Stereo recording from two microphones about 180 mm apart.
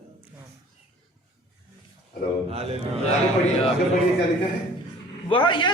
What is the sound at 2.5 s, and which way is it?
Speech, 35° right (ahead or behind).